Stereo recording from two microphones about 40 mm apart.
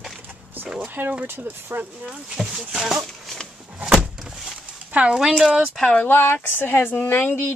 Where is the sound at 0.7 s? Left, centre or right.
Right.